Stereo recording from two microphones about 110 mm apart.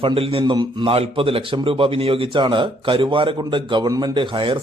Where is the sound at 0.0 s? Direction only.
55° right (ahead or behind).